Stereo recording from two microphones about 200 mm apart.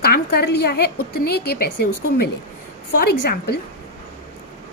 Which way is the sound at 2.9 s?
50° left (ahead or behind).